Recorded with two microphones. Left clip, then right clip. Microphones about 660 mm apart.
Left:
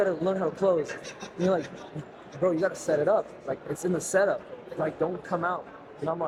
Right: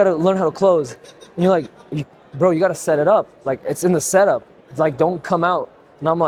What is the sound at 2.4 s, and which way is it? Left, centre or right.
A man's voice, right.